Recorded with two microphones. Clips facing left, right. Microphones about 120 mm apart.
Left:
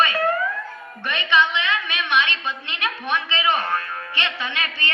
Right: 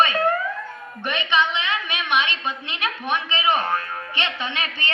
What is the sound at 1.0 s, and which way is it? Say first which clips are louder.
A woman's voice: left 1 dB; 15° right (ahead or behind).